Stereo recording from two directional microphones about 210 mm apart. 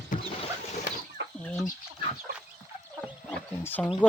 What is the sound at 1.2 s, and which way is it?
Chicken, 60° right (ahead or behind).